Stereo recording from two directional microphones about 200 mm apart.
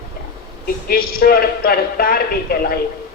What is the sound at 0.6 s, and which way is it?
A man's voice, 50° left (ahead or behind).